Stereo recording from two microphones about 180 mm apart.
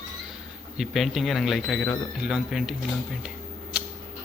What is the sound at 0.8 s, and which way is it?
A man's voice, centre (ahead or behind).